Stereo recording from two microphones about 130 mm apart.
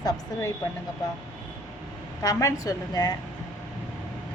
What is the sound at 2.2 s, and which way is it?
Speech, 25° left (ahead or behind).